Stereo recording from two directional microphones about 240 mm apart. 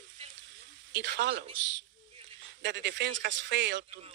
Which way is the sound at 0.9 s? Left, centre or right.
Right.